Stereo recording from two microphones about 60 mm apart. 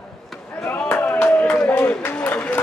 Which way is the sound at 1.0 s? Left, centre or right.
Left.